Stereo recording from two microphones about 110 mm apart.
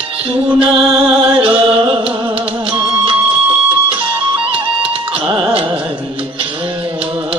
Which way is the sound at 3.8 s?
55° right (ahead or behind).